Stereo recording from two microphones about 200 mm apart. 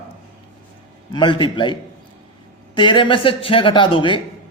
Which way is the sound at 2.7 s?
25° left (ahead or behind).